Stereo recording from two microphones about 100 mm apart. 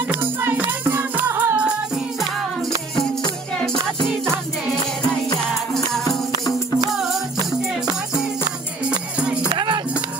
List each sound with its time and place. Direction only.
0.1 s music: 20° right (ahead or behind)
8.8 s music: 10° right (ahead or behind)
9.5 s music: 50° right (ahead or behind)